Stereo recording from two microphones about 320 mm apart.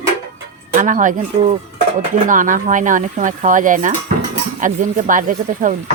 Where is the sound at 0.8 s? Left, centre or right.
Right.